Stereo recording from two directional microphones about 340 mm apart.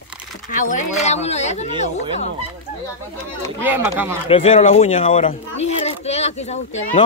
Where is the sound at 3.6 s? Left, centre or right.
Centre.